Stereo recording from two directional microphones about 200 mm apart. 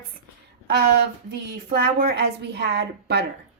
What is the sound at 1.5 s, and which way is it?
Speech, 50° right (ahead or behind).